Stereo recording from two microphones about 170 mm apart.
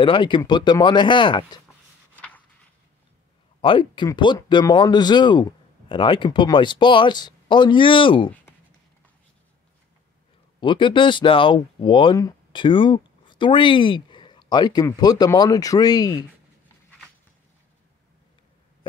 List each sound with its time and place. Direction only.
0.0 s speech: 30° left (ahead or behind)
2.1 s a sound: 10° left (ahead or behind)
3.6 s speech: 30° left (ahead or behind)
10.6 s speech: 30° left (ahead or behind)